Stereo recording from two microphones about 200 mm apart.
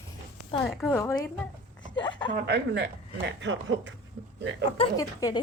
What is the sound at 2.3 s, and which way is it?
Speech, 55° right (ahead or behind).